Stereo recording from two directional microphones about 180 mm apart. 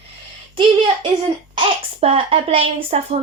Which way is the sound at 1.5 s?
30° right (ahead or behind).